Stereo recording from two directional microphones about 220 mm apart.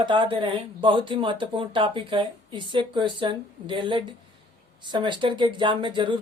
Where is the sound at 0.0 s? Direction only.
20° right (ahead or behind).